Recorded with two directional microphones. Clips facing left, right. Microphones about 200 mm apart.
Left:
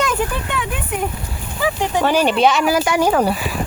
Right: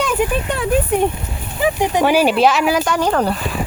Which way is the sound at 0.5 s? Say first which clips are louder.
Right 7 dB; 40° right (ahead or behind).